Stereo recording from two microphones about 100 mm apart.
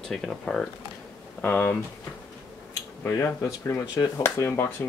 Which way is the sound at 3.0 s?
25° left (ahead or behind).